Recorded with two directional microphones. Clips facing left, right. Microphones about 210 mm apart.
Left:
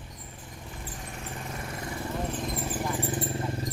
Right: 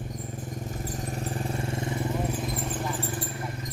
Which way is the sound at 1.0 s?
40° right (ahead or behind).